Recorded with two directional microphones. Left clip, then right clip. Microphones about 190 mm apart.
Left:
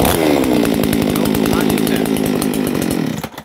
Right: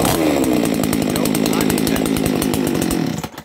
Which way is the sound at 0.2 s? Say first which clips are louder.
Left 3 dB; 30° left (ahead or behind).